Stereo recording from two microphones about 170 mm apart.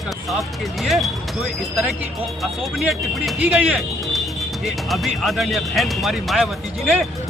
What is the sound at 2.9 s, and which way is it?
Speech, 5° right (ahead or behind).